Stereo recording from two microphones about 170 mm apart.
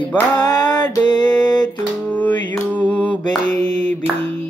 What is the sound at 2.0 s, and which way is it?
Music, 10° left (ahead or behind).